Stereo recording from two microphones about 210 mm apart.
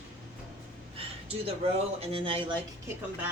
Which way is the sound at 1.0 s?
25° right (ahead or behind).